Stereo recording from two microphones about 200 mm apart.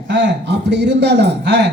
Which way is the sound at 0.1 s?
60° right (ahead or behind).